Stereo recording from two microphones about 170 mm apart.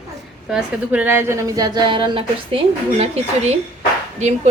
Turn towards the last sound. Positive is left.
turn(degrees=-40)  # may be behind; listen again after turning